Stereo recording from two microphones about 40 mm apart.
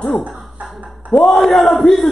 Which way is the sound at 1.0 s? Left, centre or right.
Left.